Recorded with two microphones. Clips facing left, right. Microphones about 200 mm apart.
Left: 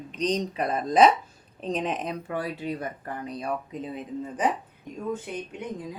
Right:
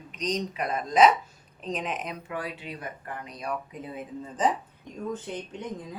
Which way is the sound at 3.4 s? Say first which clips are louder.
Left 1 dB; 25° left (ahead or behind).